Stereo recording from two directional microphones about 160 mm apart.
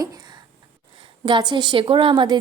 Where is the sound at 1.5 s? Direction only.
30° right (ahead or behind).